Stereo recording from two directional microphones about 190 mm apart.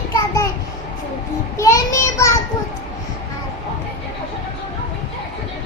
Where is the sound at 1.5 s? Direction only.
15° left (ahead or behind).